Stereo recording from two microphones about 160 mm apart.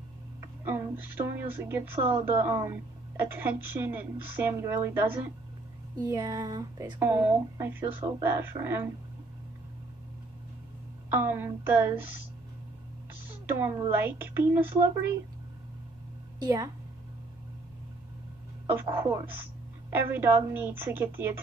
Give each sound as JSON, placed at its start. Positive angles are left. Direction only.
{"t": 0.4, "sound": "speech", "side_deg": -15}
{"t": 11.1, "sound": "speech", "side_deg": -15}
{"t": 13.5, "sound": "a woman's voice", "side_deg": -15}
{"t": 16.3, "sound": "a woman's voice", "side_deg": -20}
{"t": 18.7, "sound": "speech", "side_deg": -15}